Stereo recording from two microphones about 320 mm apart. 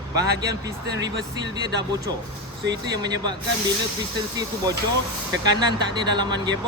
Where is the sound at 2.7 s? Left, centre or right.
Centre.